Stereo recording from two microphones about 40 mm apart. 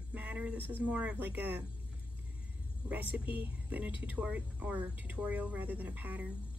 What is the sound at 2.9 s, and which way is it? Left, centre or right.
Speech, right.